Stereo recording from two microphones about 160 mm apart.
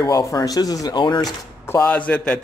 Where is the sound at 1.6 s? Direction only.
15° left (ahead or behind).